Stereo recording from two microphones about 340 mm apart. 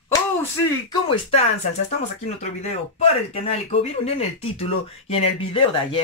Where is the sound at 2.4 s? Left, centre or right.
Centre.